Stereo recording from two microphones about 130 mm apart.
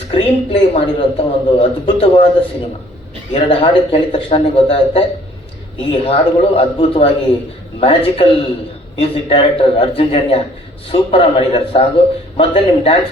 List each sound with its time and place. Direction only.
0.1 s a man's voice: 45° left (ahead or behind)
3.3 s a man's voice: 45° left (ahead or behind)